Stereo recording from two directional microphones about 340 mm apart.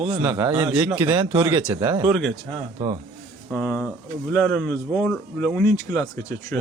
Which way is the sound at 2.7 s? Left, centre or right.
Centre.